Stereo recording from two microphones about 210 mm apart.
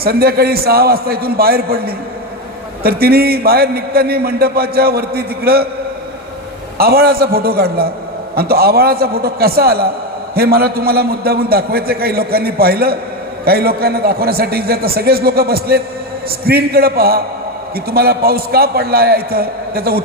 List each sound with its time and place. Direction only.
0.0 s a man's voice: 45° right (ahead or behind)
6.7 s a man's voice: 45° right (ahead or behind)